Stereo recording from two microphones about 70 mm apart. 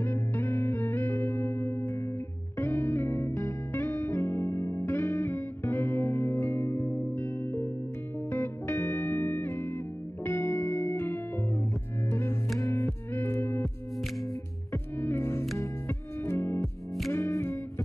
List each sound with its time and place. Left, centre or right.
0.0 s music: left
15.0 s music: left